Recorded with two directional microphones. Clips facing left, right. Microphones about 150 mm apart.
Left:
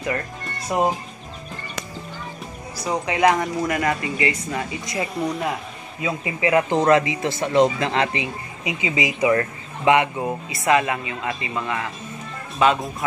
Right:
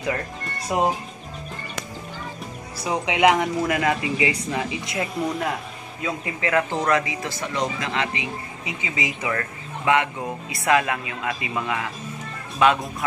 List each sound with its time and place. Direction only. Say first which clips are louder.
0.7 s speech: left 1 dB; 5° right (ahead or behind)
2.8 s speech: even; 5° right (ahead or behind)
4.9 s speech: left 2 dB; centre (ahead or behind); by 8.3 s 35° left (ahead or behind)
8.6 s speech: left 6 dB; 15° left (ahead or behind); by 12.9 s centre (ahead or behind)